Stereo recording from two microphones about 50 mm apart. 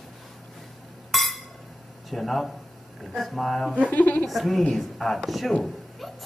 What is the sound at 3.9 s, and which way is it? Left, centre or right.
Speech, left.